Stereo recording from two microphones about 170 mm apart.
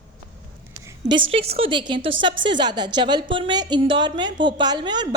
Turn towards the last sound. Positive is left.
turn(degrees=-25)  # may be behind; listen again after turning